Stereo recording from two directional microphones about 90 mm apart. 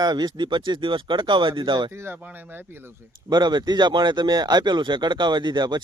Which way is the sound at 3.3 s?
55° right (ahead or behind).